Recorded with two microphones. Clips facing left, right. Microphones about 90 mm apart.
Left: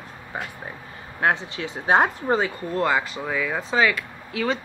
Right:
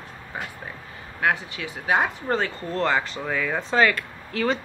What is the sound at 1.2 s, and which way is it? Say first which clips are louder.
Speech: left 2 dB; 25° left (ahead or behind).